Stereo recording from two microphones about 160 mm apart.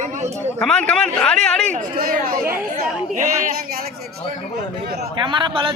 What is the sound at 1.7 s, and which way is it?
Speech, 60° right (ahead or behind).